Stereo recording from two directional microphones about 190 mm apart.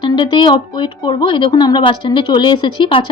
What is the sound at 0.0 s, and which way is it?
Speech, 25° left (ahead or behind).